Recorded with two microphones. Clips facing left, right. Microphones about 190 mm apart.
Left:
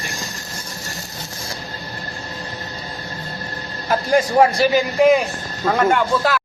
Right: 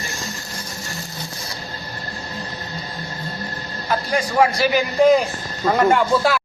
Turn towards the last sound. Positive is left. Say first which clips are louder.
# right 1 dB
turn(degrees=-5)  # may be behind; listen again after turning